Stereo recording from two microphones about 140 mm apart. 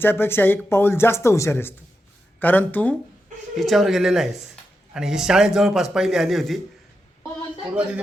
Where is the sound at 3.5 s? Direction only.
Centre (ahead or behind).